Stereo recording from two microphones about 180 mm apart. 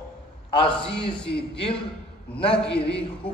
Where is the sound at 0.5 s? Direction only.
30° left (ahead or behind).